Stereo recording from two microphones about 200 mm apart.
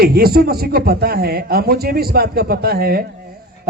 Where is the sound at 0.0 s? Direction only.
50° right (ahead or behind).